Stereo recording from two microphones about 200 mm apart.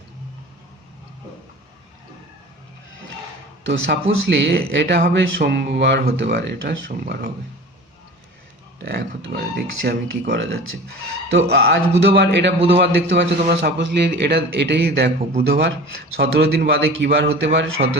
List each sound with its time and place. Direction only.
3.7 s speech: 55° right (ahead or behind)
8.8 s speech: 55° right (ahead or behind)